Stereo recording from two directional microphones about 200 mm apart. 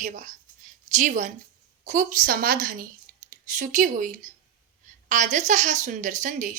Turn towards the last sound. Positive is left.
turn(degrees=-40)  # may be behind; listen again after turning